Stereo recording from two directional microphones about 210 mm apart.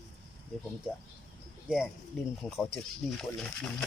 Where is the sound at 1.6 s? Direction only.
5° right (ahead or behind).